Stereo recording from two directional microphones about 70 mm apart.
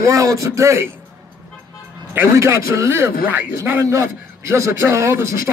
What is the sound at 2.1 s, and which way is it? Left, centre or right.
A man's voice, right.